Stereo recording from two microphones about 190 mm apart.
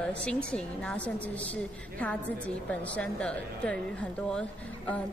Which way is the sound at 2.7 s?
5° left (ahead or behind).